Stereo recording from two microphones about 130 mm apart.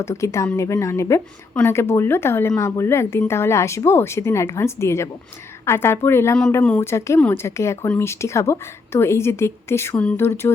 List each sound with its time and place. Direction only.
0.0 s a woman's voice: 20° left (ahead or behind)